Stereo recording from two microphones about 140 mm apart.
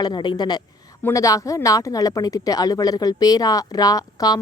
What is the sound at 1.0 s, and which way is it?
Speech, 20° left (ahead or behind).